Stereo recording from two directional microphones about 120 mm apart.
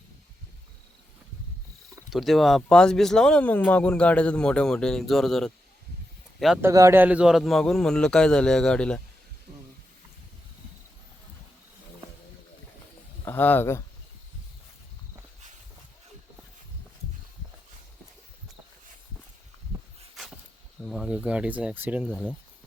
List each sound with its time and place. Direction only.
2.0 s speech: centre (ahead or behind)
6.6 s a man's voice: 25° right (ahead or behind); by 9.0 s 5° left (ahead or behind)
13.2 s speech: 15° left (ahead or behind)
20.8 s speech: centre (ahead or behind)